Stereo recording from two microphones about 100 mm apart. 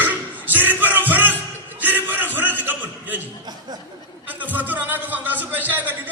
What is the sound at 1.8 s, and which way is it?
Chuckle, 20° right (ahead or behind).